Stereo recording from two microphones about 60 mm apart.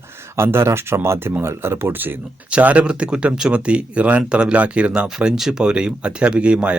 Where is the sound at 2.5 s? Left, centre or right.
Right.